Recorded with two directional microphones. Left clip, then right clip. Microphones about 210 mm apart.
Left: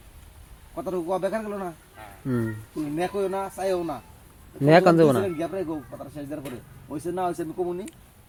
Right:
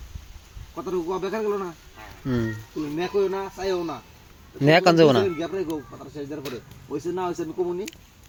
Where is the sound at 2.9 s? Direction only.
25° left (ahead or behind).